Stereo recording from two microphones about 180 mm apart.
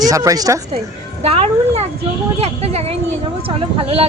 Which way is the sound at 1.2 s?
35° right (ahead or behind).